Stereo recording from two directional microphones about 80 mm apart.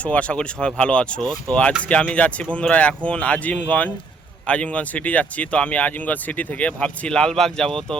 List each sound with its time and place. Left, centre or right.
0.0 s speech: centre